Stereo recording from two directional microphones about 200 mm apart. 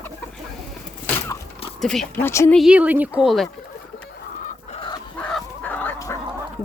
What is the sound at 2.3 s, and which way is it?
Speech, 15° left (ahead or behind).